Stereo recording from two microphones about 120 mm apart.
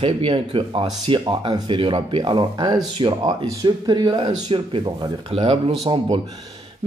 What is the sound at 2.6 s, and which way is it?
Speech, 35° right (ahead or behind).